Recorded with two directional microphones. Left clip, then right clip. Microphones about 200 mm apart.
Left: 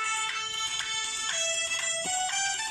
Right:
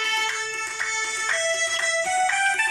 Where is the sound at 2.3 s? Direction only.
40° right (ahead or behind).